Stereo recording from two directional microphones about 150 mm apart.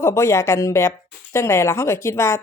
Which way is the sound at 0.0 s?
20° left (ahead or behind).